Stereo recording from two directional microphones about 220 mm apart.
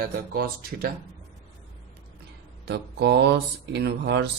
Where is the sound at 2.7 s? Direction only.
50° right (ahead or behind).